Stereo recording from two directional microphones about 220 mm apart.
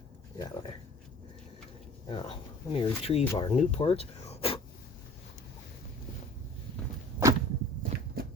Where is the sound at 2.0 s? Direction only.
25° left (ahead or behind).